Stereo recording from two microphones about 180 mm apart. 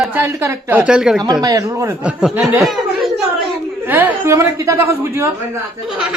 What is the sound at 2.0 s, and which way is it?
A man's voice, 5° right (ahead or behind).